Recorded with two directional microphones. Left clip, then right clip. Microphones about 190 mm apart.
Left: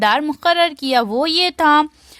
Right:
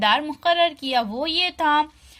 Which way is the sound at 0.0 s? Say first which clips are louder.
Left 4 dB; 55° left (ahead or behind).